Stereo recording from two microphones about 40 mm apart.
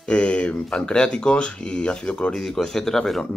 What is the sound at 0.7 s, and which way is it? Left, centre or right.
Speech, left.